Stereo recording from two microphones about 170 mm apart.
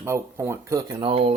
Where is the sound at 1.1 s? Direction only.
35° right (ahead or behind).